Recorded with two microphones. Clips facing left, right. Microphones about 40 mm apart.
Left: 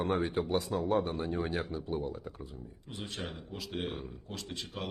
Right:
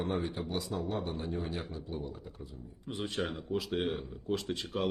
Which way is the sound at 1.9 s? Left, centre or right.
Left.